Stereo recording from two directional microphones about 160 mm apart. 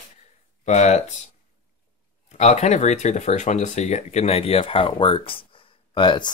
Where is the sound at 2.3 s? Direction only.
45° left (ahead or behind).